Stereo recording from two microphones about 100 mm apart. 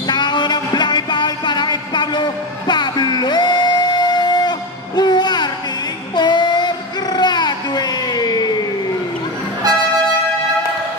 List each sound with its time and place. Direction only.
0.0 s music: 45° left (ahead or behind)
6.1 s child singing: 45° left (ahead or behind)